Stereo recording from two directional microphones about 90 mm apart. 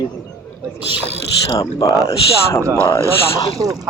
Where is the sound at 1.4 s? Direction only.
40° left (ahead or behind).